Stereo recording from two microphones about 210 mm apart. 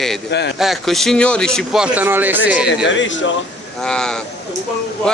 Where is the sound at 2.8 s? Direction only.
60° left (ahead or behind).